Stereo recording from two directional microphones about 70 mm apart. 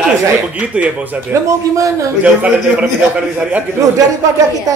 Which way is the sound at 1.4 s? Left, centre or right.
Right.